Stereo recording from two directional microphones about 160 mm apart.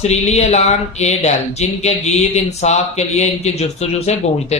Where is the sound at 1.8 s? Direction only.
45° left (ahead or behind).